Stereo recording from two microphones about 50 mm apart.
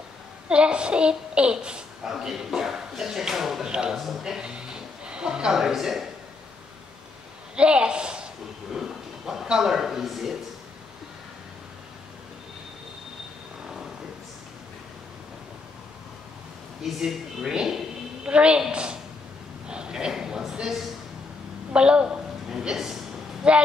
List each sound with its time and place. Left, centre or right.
0.5 s a child's voice: centre
7.5 s a woman's voice: right
8.7 s speech: centre
16.8 s speech: centre
18.2 s a woman's voice: right
19.7 s a sound: centre
21.7 s a woman's voice: centre